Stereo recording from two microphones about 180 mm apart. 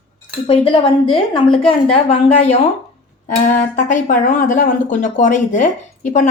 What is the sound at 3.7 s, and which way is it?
Speech, 45° left (ahead or behind).